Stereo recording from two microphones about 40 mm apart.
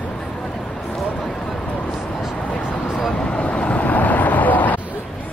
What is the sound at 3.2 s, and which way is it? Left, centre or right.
Vehicle, left.